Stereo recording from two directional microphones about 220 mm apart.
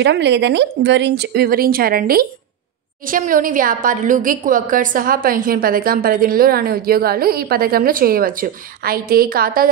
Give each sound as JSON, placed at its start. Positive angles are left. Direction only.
{"t": 0.0, "sound": "a woman's voice", "side_deg": -50}